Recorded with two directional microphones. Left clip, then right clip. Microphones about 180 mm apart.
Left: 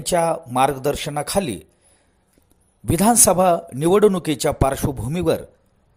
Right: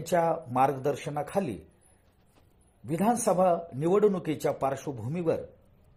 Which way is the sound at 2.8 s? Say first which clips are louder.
Left 10 dB; 40° left (ahead or behind).